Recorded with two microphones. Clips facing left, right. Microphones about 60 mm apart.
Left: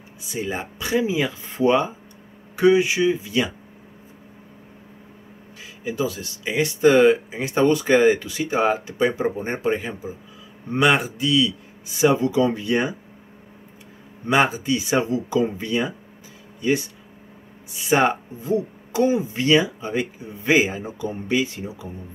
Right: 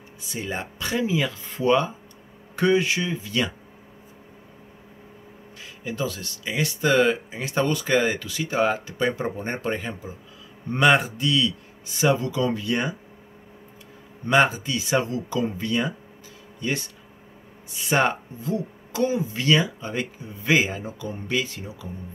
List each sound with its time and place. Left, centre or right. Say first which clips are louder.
0.3 s speech: left 3 dB; centre
2.5 s speech: left 4 dB; centre
5.6 s a man's voice: left 4 dB; centre
12.0 s speech: left 4 dB; centre
14.2 s speech: even; centre
17.7 s speech: left 3 dB; centre